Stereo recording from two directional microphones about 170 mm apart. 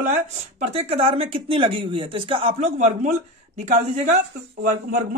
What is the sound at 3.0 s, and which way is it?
Speech, 45° right (ahead or behind).